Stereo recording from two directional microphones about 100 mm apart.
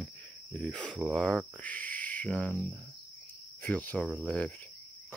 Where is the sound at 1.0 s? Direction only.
5° left (ahead or behind).